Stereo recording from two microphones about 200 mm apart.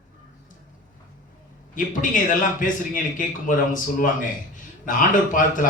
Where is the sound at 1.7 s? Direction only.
40° left (ahead or behind).